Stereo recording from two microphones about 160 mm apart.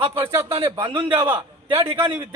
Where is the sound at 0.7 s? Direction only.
30° right (ahead or behind).